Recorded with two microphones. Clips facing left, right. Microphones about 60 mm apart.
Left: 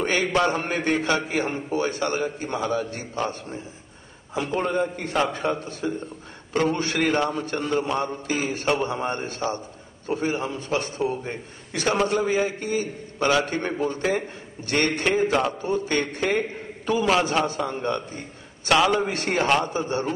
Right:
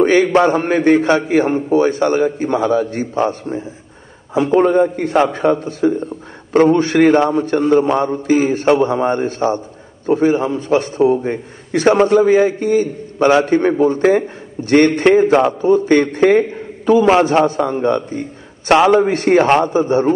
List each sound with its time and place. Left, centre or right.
0.0 s a man's voice: right